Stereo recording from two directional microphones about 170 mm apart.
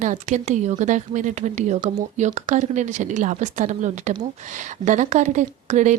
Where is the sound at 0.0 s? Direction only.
45° right (ahead or behind).